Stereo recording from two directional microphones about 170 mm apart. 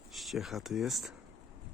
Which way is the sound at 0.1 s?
Centre (ahead or behind).